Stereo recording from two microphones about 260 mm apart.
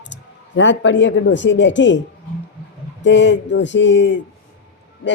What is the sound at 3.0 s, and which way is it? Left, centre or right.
Speech, left.